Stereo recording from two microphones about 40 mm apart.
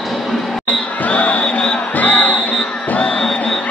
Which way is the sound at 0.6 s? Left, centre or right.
Left.